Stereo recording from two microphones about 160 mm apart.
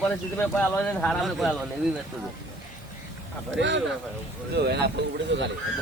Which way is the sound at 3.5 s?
90° right.